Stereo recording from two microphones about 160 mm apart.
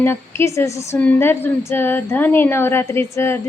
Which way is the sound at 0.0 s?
15° left (ahead or behind).